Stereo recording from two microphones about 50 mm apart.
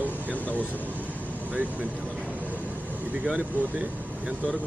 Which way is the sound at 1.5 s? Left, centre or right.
Right.